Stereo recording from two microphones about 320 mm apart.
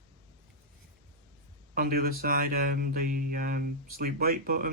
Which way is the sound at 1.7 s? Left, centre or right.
Right.